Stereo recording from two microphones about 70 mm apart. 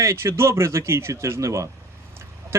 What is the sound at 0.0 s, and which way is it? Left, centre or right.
A man's voice, right.